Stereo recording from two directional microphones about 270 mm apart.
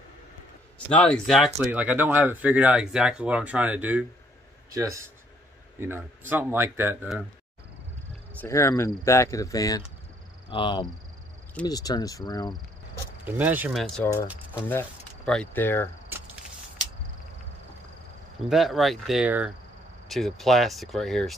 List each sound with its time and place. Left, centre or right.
0.9 s speech: centre
8.4 s speech: centre
13.2 s speech: centre
18.5 s speech: centre